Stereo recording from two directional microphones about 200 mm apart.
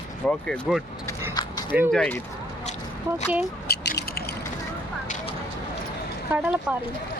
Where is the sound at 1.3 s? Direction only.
20° left (ahead or behind).